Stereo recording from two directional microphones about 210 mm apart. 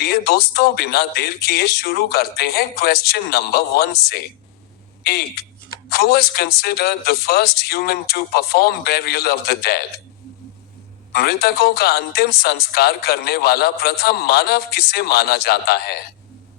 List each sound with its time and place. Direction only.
0.0 s a man's voice: 50° left (ahead or behind)
11.1 s a man's voice: 50° left (ahead or behind)